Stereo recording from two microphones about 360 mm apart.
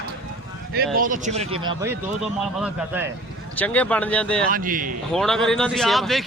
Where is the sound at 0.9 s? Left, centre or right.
Right; by 4.4 s centre.